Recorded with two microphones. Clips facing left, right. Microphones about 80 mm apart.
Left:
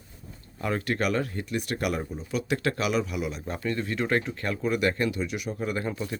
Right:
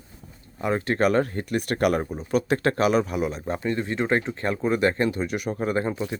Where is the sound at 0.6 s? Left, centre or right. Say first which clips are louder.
Right 5 dB; right.